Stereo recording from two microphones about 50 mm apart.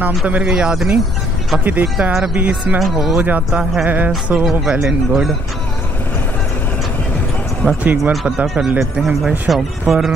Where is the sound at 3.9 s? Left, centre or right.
Right.